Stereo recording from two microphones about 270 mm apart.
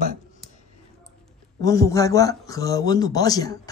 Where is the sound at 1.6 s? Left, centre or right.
Centre.